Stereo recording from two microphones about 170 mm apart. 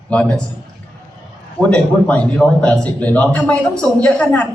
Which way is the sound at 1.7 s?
10° left (ahead or behind).